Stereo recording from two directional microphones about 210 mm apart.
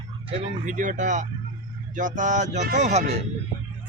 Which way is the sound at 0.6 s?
35° right (ahead or behind).